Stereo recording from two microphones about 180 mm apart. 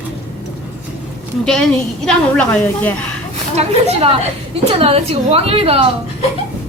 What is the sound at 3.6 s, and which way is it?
A woman's voice, 35° right (ahead or behind).